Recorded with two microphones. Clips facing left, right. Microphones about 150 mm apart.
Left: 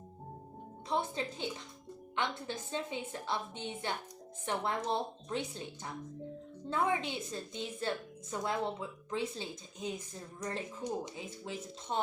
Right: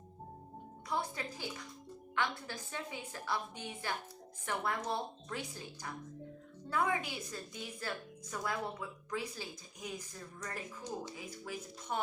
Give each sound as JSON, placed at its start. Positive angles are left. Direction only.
{"t": 0.9, "sound": "a woman's voice", "side_deg": 25}